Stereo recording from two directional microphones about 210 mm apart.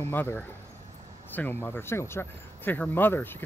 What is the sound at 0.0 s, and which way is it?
Speech, 10° left (ahead or behind).